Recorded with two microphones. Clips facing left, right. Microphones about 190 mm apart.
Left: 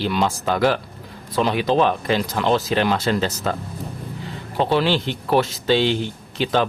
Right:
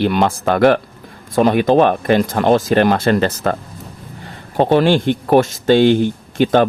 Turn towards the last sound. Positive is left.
turn(degrees=-50)  # may be behind; listen again after turning